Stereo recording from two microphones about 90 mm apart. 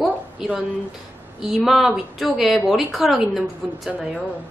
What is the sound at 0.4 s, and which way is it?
A woman's voice, 5° right (ahead or behind).